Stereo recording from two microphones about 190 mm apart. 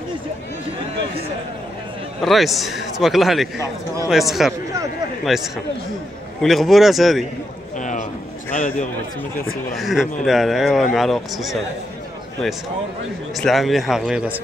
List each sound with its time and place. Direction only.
2.2 s a man's voice: centre (ahead or behind)
7.7 s a sound: 40° left (ahead or behind)
9.8 s a man's voice: centre (ahead or behind)
13.4 s a man's voice: centre (ahead or behind)